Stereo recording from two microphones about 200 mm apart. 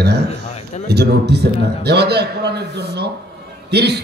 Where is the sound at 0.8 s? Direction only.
55° right (ahead or behind).